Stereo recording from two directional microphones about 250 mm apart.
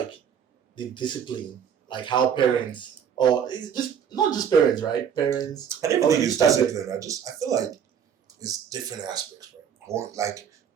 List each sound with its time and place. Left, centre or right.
0.8 s speech: centre
5.6 s speech: centre